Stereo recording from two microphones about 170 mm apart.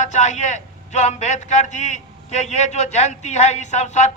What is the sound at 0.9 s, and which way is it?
A man's voice, 45° left (ahead or behind).